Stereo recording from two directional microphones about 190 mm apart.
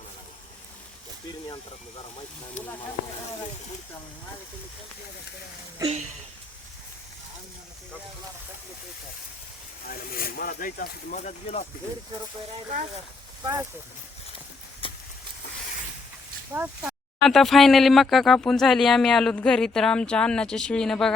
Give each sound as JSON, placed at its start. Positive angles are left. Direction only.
{"t": 2.6, "sound": "speech", "side_deg": 35}
{"t": 5.8, "sound": "speech", "side_deg": -35}
{"t": 9.8, "sound": "speech", "side_deg": 50}
{"t": 13.4, "sound": "speech", "side_deg": -20}
{"t": 14.8, "sound": "a sound", "side_deg": 30}
{"t": 16.5, "sound": "speech", "side_deg": -10}
{"t": 17.2, "sound": "speech", "side_deg": 0}